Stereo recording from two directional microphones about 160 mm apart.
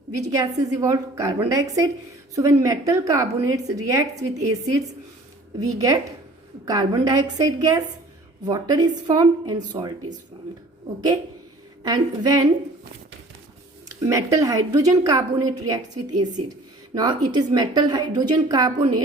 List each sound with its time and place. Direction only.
0.1 s a woman's voice: 20° right (ahead or behind)
11.8 s a woman's voice: 25° right (ahead or behind)
13.8 s a woman's voice: 20° right (ahead or behind)